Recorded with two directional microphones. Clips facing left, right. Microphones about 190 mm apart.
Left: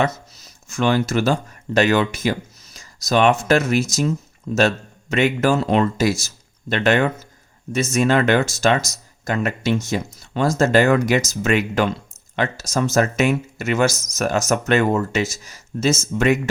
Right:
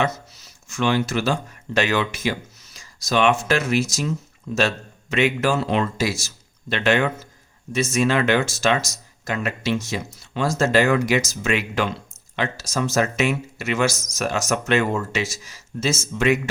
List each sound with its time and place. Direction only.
0.7 s speech: 40° left (ahead or behind)